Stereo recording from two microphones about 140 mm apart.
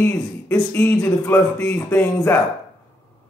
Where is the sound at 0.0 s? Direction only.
15° left (ahead or behind).